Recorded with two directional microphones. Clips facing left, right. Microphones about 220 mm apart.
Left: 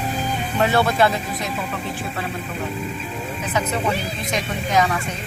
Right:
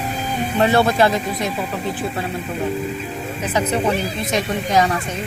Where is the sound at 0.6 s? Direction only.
30° right (ahead or behind).